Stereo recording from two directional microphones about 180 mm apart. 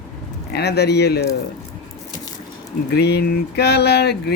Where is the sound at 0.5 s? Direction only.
65° left (ahead or behind).